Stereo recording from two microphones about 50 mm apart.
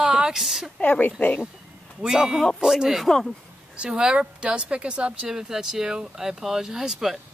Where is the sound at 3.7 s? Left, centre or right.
Centre.